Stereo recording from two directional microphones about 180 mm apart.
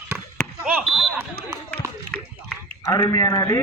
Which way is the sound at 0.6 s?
Centre (ahead or behind).